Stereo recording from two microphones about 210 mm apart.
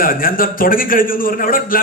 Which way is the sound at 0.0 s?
45° left (ahead or behind).